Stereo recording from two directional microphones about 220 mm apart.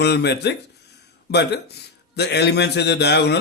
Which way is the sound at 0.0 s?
50° left (ahead or behind).